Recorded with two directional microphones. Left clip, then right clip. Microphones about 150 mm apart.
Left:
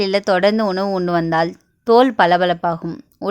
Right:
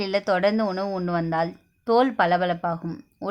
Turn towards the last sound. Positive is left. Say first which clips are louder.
# left 7 dB
turn(degrees=30)  # may be behind; listen again after turning